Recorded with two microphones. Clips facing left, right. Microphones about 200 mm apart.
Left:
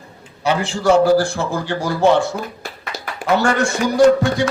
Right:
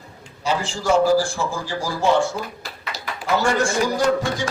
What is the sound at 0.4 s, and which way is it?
A man's voice, 65° left (ahead or behind).